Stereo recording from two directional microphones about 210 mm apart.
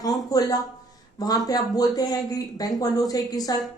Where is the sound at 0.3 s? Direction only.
20° left (ahead or behind).